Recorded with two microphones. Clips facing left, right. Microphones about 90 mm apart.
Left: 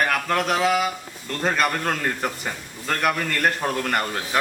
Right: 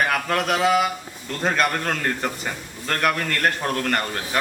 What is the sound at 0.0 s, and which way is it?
A man's voice, centre (ahead or behind).